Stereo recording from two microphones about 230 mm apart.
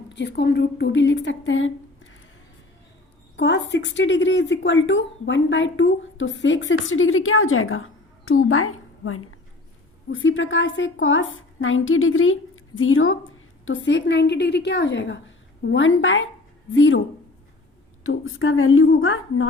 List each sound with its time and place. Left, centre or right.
0.1 s a woman's voice: left
3.3 s speech: left
18.0 s speech: left